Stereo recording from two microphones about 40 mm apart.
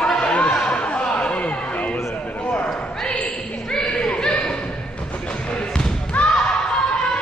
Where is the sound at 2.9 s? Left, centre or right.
Centre.